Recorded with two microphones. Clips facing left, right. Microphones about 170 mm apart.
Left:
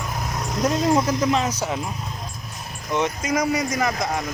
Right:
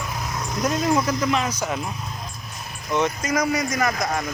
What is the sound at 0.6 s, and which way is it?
Speech, 25° left (ahead or behind).